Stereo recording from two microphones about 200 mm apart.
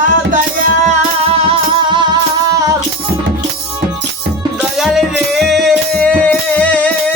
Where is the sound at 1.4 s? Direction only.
25° right (ahead or behind).